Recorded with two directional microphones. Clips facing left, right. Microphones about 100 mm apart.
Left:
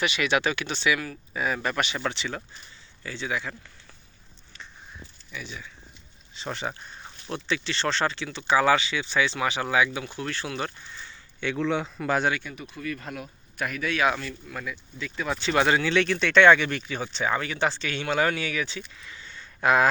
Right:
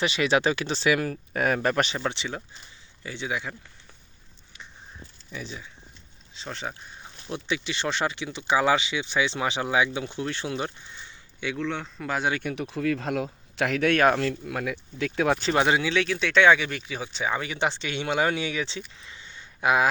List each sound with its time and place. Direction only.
0.0 s speech: 35° right (ahead or behind)
2.0 s speech: 20° right (ahead or behind)
5.3 s speech: 30° right (ahead or behind)
6.3 s speech: 5° left (ahead or behind); by 11.4 s 20° right (ahead or behind)
11.5 s speech: 5° left (ahead or behind)
12.4 s speech: 65° right (ahead or behind)
12.7 s speech: 90° right; by 14.2 s 50° right (ahead or behind)
14.2 s speech: 70° right (ahead or behind)
15.5 s speech: 15° right (ahead or behind)
15.9 s speech: 5° right (ahead or behind); by 18.8 s 25° right (ahead or behind)
18.9 s a sound: 20° right (ahead or behind)
19.5 s speech: 10° right (ahead or behind)